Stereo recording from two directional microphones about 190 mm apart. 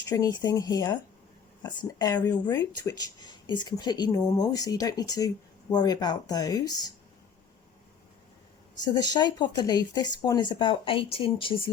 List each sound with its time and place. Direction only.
0.1 s speech: 20° left (ahead or behind)
8.8 s speech: 20° left (ahead or behind)